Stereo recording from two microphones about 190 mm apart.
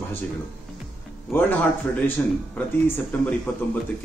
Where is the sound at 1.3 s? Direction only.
10° left (ahead or behind).